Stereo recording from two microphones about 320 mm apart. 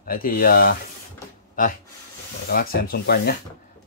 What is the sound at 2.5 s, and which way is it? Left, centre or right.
Rub, left.